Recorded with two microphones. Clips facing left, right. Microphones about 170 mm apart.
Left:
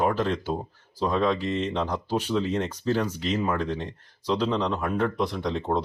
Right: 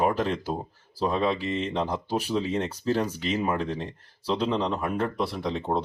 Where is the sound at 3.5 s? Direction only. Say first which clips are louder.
Left 1 dB; 35° right (ahead or behind).